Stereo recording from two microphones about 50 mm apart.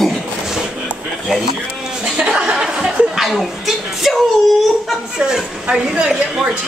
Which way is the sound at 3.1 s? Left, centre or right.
Centre.